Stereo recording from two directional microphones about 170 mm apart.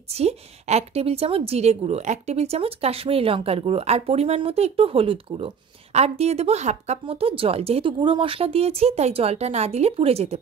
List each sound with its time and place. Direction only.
0.1 s a woman's voice: 35° right (ahead or behind)